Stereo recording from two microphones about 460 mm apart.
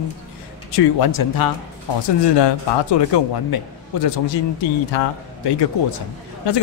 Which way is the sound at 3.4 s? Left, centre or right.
Left.